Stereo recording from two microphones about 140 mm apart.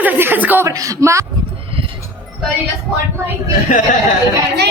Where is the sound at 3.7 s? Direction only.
90° left.